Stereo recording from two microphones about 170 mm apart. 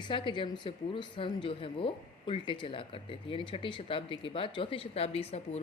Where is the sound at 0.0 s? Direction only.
30° left (ahead or behind).